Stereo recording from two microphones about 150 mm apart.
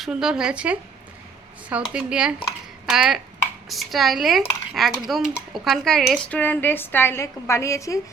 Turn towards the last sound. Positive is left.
turn(degrees=20)  # may be behind; listen again after turning